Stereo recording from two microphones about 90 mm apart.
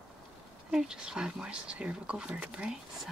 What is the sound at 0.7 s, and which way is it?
Speech, 5° right (ahead or behind).